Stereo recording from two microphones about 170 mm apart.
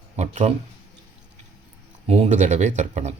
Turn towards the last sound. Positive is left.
turn(degrees=-40)  # may be behind; listen again after turning